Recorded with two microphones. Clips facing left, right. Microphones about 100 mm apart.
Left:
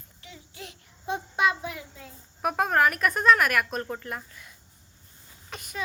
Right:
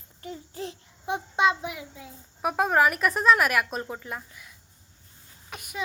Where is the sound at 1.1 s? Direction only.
20° right (ahead or behind).